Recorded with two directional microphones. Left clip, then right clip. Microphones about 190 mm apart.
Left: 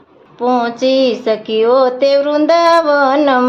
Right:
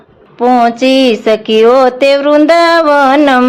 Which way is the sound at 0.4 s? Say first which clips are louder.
Right 6 dB; 25° right (ahead or behind).